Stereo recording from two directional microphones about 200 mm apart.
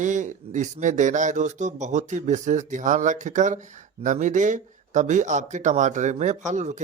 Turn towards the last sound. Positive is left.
turn(degrees=-35)  # may be behind; listen again after turning